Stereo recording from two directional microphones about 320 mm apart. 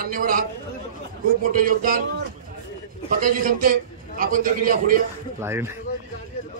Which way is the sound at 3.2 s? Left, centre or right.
Right.